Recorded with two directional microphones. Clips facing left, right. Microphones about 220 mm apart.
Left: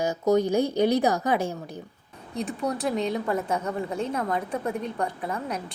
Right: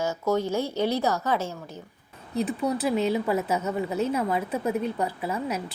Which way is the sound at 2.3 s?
5° right (ahead or behind).